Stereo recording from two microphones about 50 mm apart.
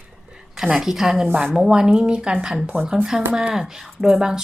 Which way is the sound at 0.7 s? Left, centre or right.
Centre.